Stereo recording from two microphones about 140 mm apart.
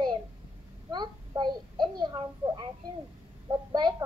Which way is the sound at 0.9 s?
30° right (ahead or behind).